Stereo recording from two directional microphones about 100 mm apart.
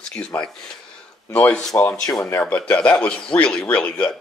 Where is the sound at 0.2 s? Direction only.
30° left (ahead or behind).